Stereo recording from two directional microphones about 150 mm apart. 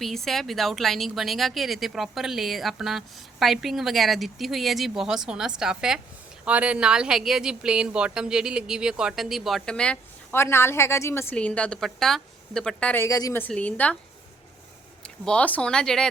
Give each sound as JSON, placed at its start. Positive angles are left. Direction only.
{"t": 0.0, "sound": "speech", "side_deg": 0}
{"t": 13.1, "sound": "a woman's voice", "side_deg": 25}
{"t": 13.4, "sound": "a woman's voice", "side_deg": 10}
{"t": 15.0, "sound": "speech", "side_deg": 5}